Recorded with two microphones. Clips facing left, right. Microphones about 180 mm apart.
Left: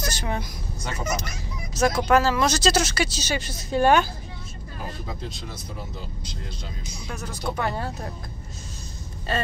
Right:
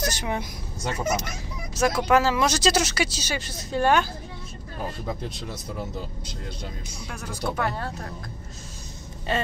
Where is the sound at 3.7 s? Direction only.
10° left (ahead or behind).